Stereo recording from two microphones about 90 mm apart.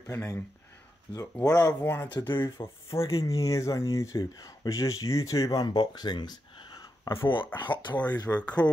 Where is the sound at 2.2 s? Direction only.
30° left (ahead or behind); by 7.1 s 45° left (ahead or behind).